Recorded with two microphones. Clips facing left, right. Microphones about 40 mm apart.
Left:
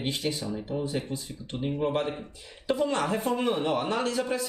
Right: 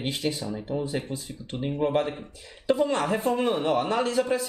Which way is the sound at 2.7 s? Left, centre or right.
Centre.